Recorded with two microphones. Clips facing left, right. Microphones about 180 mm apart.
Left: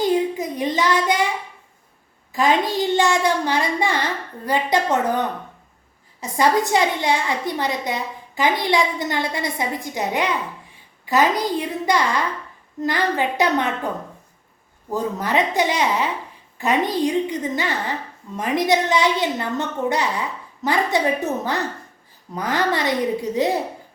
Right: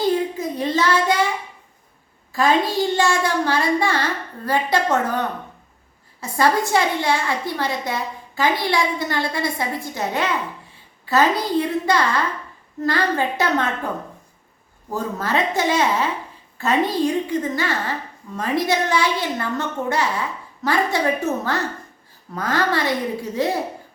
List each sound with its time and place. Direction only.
0.0 s child singing: 15° left (ahead or behind)
2.3 s a child's voice: 20° left (ahead or behind)
14.9 s a child's voice: 15° left (ahead or behind)